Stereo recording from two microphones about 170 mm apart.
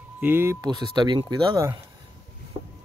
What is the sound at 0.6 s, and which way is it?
Speech, 25° right (ahead or behind).